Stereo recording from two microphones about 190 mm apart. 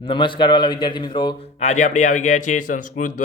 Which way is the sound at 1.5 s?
40° left (ahead or behind).